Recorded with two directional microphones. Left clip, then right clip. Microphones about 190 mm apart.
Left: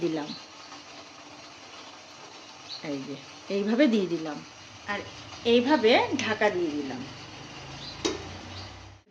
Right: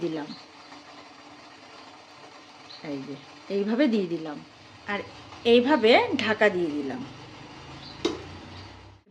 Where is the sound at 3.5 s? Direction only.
5° right (ahead or behind).